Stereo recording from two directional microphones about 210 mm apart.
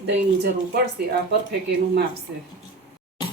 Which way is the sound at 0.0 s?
50° right (ahead or behind).